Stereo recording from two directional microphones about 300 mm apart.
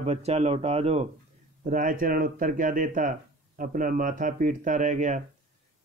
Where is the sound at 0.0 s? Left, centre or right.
Right.